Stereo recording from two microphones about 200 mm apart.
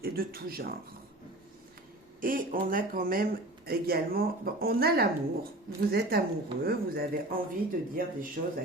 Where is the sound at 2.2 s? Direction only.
45° right (ahead or behind).